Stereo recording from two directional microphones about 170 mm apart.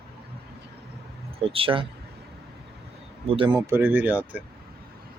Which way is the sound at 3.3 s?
30° right (ahead or behind).